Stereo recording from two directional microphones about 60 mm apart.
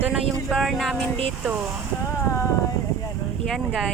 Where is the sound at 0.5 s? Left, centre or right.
Centre.